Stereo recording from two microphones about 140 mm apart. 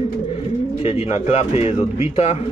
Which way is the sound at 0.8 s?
45° left (ahead or behind).